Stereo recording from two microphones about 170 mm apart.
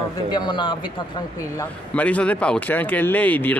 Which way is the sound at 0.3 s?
25° left (ahead or behind).